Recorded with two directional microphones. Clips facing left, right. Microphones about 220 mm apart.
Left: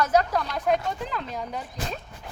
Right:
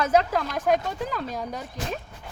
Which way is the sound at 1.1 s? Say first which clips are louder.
Right 1 dB; 45° right (ahead or behind).